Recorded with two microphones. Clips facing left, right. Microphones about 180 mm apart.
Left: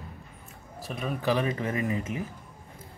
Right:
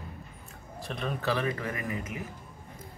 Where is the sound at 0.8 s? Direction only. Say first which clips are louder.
Left 1 dB; 5° left (ahead or behind).